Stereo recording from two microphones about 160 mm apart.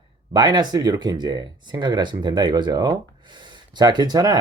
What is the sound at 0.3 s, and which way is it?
Speech, 25° right (ahead or behind).